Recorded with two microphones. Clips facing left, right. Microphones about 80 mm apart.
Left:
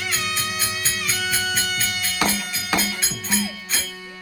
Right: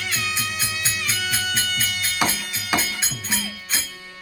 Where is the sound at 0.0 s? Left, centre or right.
Centre.